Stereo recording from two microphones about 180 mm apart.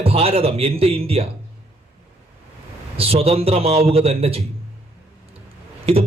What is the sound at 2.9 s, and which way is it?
A man's voice, 35° right (ahead or behind).